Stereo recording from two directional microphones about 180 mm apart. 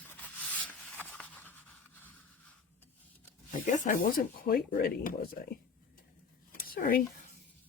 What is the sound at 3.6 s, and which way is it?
Speech, 45° left (ahead or behind).